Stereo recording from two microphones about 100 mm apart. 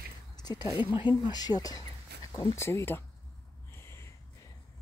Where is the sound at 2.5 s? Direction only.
25° left (ahead or behind).